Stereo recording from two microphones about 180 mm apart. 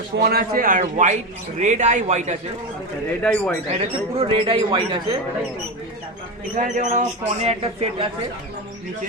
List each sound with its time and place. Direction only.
0.2 s a man's voice: 60° right (ahead or behind); by 2.3 s 40° right (ahead or behind)
3.1 s a man's voice: 5° left (ahead or behind)
4.2 s speech: 30° right (ahead or behind)
6.6 s speech: 45° right (ahead or behind)